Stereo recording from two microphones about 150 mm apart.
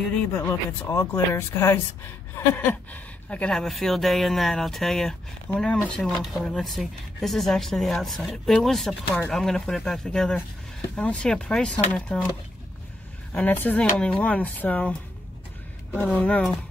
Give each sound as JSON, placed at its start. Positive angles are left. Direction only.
{"t": 0.2, "sound": "speech", "side_deg": 15}
{"t": 13.3, "sound": "speech", "side_deg": 10}